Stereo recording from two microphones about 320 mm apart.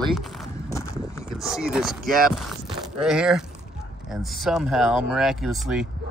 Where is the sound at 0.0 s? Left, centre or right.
Centre.